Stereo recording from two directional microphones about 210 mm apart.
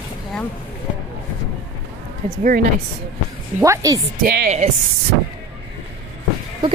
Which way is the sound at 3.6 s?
15° right (ahead or behind).